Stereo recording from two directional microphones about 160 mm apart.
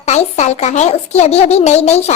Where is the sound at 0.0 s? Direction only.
45° left (ahead or behind).